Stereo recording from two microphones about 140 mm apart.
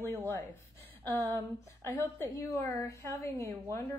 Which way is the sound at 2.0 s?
20° left (ahead or behind).